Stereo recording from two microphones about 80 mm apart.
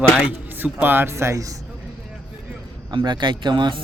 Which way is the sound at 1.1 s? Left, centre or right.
Right.